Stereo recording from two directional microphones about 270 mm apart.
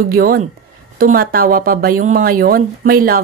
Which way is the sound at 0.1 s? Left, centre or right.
Right.